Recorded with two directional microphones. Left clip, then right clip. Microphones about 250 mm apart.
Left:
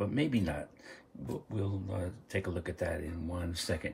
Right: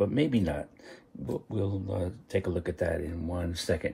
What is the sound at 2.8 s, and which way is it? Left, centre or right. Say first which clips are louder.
Speech: right 5 dB; right.